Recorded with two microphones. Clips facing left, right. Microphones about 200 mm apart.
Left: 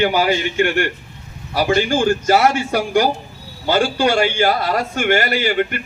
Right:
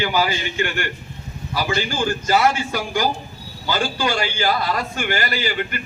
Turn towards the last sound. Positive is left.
turn(degrees=55)  # may be behind; listen again after turning